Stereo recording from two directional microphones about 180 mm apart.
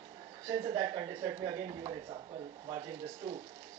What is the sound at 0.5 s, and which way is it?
A man's voice, 25° right (ahead or behind).